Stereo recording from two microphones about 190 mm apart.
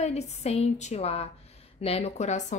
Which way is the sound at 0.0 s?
35° left (ahead or behind).